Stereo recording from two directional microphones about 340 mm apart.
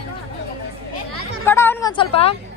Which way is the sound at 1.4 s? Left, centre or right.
Centre.